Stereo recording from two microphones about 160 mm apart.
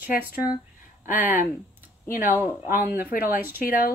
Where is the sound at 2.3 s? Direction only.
15° right (ahead or behind).